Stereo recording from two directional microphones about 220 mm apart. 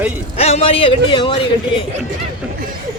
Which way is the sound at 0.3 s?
30° left (ahead or behind).